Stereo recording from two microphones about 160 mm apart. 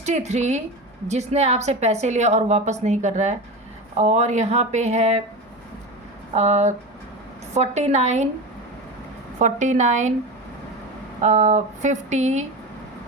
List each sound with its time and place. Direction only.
0.0 s a woman's voice: 45° right (ahead or behind)
6.3 s a woman's voice: 45° right (ahead or behind)
9.4 s a woman's voice: 50° right (ahead or behind)
11.2 s a woman's voice: 45° right (ahead or behind)